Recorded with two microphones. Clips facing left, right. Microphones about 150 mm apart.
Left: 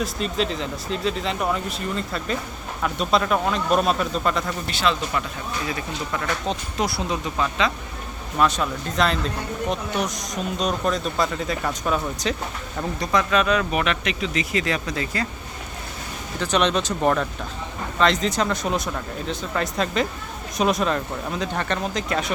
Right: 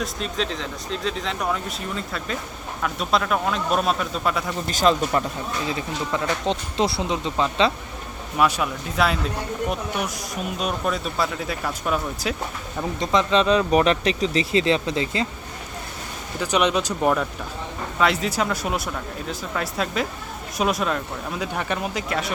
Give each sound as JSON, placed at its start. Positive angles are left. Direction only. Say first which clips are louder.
{"t": 0.0, "sound": "speech", "louder": "left 2 dB", "side_deg": 0}
{"t": 4.7, "sound": "speech", "louder": "right 5 dB", "side_deg": -40}
{"t": 5.7, "sound": "speech", "louder": "right 2 dB", "side_deg": -20}
{"t": 8.4, "sound": "speech", "louder": "even", "side_deg": -10}
{"t": 13.0, "sound": "speech", "louder": "right 2 dB", "side_deg": -20}
{"t": 16.4, "sound": "speech", "louder": "even", "side_deg": -10}